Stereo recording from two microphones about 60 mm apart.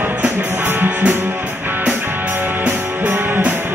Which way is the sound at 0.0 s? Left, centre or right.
Right.